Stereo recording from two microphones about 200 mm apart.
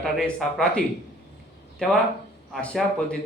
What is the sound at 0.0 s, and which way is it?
Speech, 5° left (ahead or behind).